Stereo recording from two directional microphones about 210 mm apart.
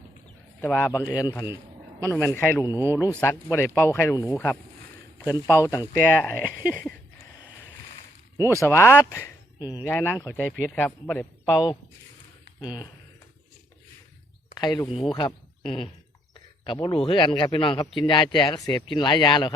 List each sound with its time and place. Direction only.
0.6 s speech: 10° left (ahead or behind)
2.7 s speech: 10° right (ahead or behind)
3.2 s speech: 10° left (ahead or behind)
8.4 s speech: 15° left (ahead or behind)
12.5 s speech: 20° left (ahead or behind)
14.5 s a man's voice: 20° left (ahead or behind)